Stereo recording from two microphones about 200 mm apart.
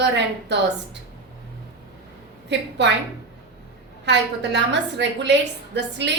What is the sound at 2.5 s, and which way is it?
Speech, 60° right (ahead or behind).